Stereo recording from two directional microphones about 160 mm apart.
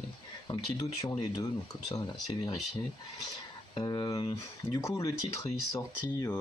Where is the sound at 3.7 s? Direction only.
30° left (ahead or behind).